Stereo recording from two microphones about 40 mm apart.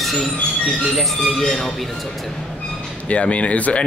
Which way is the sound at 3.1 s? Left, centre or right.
Left.